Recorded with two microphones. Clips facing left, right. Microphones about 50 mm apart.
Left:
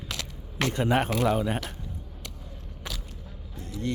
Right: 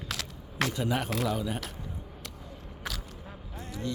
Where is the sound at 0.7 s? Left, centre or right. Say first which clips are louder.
Left 9 dB; left.